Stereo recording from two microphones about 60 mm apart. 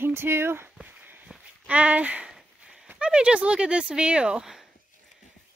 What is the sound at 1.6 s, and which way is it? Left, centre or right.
Speech, right.